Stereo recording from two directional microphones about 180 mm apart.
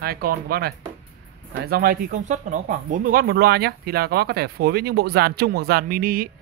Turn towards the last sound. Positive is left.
turn(degrees=-55)  # may be behind; listen again after turning